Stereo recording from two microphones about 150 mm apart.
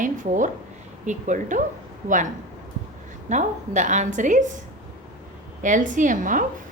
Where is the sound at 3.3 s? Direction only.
55° right (ahead or behind).